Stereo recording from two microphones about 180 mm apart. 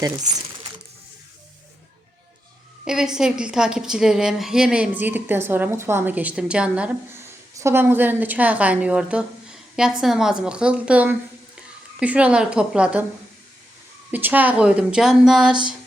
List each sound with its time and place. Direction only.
0.3 s crumpling: 20° right (ahead or behind)
2.8 s a woman's voice: 5° right (ahead or behind)
14.1 s speech: 10° right (ahead or behind)